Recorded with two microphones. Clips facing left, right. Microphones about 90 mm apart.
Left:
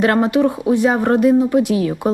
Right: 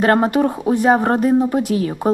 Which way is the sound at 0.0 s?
45° right (ahead or behind).